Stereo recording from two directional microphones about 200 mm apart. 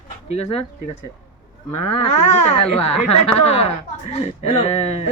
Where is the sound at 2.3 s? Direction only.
35° left (ahead or behind).